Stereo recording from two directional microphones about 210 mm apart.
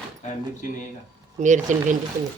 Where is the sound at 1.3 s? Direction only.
35° right (ahead or behind).